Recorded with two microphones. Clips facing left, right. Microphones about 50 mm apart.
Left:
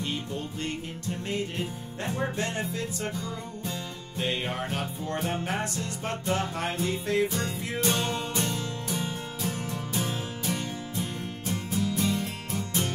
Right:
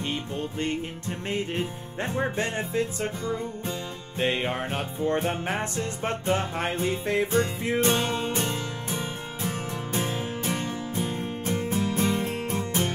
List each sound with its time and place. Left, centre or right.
0.6 s music: right